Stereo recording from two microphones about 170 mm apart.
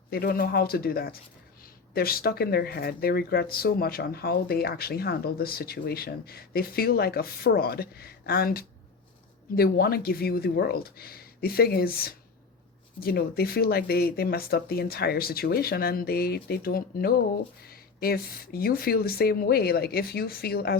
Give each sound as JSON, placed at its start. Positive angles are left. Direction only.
{"t": 0.1, "sound": "speech", "side_deg": 65}